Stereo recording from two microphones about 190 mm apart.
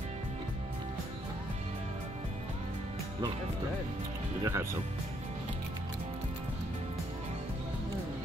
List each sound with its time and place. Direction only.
4.4 s speech: 15° right (ahead or behind)